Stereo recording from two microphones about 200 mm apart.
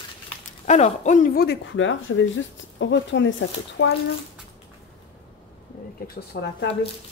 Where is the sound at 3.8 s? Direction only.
55° left (ahead or behind).